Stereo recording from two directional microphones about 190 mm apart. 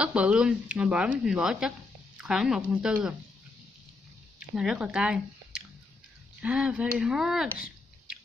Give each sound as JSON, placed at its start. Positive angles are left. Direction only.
{"t": 0.0, "sound": "speech", "side_deg": -5}
{"t": 4.4, "sound": "speech", "side_deg": -5}
{"t": 7.5, "sound": "a sound", "side_deg": -5}